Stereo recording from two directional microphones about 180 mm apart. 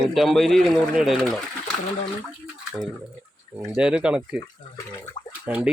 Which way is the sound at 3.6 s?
5° right (ahead or behind).